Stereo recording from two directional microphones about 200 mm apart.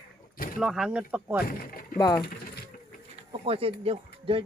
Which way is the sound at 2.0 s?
20° left (ahead or behind).